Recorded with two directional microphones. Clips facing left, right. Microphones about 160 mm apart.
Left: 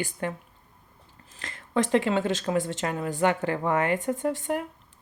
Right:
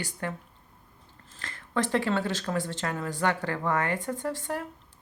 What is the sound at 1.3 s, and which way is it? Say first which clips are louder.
Speech: left 3 dB; 20° left (ahead or behind).